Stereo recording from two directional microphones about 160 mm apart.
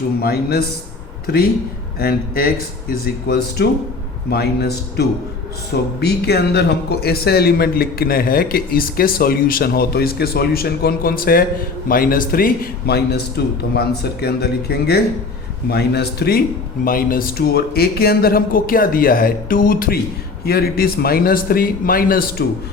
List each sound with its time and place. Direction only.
0.2 s a man's voice: 75° left (ahead or behind)
16.8 s speech: 60° left (ahead or behind)